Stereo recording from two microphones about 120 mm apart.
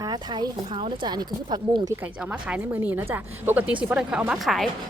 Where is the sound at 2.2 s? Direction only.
10° right (ahead or behind).